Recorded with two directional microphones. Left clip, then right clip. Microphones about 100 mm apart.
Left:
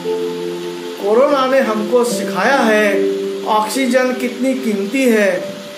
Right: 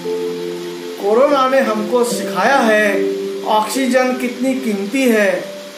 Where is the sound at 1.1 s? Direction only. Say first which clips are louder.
Even; 15° left (ahead or behind).